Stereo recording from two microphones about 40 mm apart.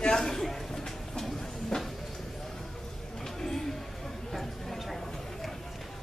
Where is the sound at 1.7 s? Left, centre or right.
Centre.